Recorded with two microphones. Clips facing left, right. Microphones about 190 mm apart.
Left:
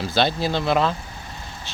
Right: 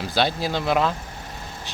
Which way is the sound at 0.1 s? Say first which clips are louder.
Left 1 dB; 10° right (ahead or behind).